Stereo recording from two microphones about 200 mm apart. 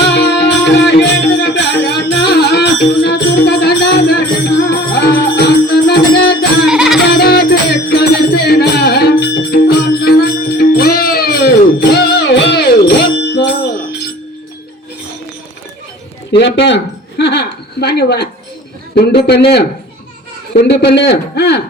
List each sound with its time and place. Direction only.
0.1 s music: 55° left (ahead or behind)
6.7 s music: centre (ahead or behind)
7.1 s music: 55° left (ahead or behind)
16.3 s a sound: 60° left (ahead or behind)
18.9 s a man's voice: 55° left (ahead or behind)
20.7 s a man's voice: 60° left (ahead or behind)